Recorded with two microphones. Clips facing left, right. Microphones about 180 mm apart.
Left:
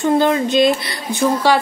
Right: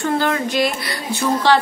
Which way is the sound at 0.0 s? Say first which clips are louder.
Left 5 dB; 20° left (ahead or behind).